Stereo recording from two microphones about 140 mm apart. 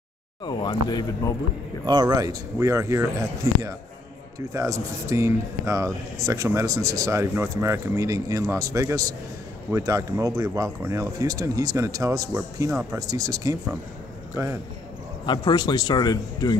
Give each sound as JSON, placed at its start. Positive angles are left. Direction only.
{"t": 0.5, "sound": "speech", "side_deg": 35}
{"t": 1.9, "sound": "a man's voice", "side_deg": -30}
{"t": 15.2, "sound": "speech", "side_deg": 30}